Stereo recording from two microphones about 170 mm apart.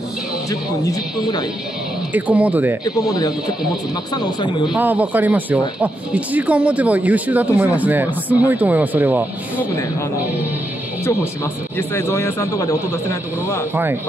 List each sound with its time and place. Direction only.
0.5 s speech: 20° left (ahead or behind)
2.1 s speech: 10° right (ahead or behind)
2.8 s speech: 20° left (ahead or behind)
4.6 s speech: 10° right (ahead or behind)
11.9 s speech: 15° left (ahead or behind)